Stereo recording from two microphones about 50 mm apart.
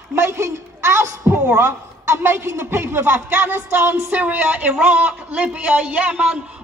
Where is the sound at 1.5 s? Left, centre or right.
Right.